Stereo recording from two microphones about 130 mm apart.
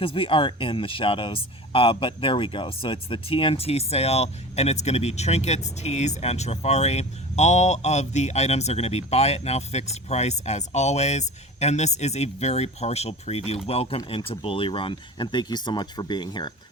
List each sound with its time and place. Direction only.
0.0 s speech: 45° left (ahead or behind)